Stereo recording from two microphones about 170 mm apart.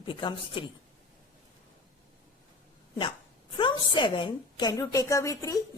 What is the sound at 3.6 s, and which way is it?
A woman's voice, 30° left (ahead or behind).